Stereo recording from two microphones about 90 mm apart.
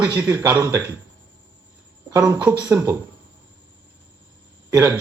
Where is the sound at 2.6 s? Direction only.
35° right (ahead or behind).